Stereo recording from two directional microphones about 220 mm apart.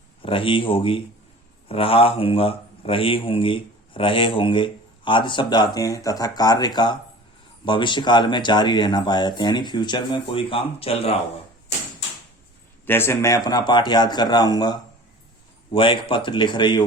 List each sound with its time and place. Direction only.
0.2 s speech: 25° left (ahead or behind)
12.8 s speech: 10° left (ahead or behind)